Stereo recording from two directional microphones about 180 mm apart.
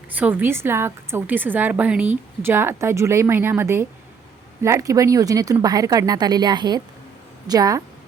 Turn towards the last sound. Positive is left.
turn(degrees=-20)  # may be behind; listen again after turning